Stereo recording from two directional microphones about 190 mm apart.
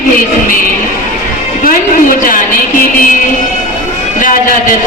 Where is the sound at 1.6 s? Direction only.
45° left (ahead or behind).